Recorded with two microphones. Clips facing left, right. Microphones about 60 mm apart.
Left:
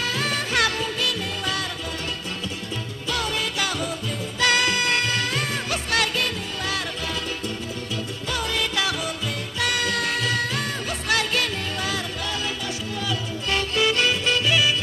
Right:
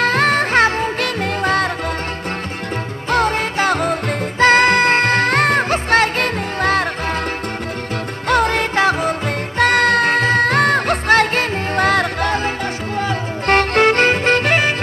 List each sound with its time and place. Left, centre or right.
0.0 s music: right
3.1 s music: right
8.3 s music: right